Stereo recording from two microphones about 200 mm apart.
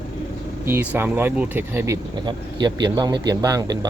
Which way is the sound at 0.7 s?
10° right (ahead or behind).